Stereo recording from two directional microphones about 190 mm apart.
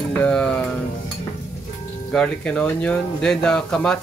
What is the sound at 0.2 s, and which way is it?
Sizzle, 5° left (ahead or behind).